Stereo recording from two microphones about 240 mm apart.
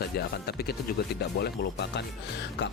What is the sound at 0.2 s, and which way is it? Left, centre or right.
Speech, left.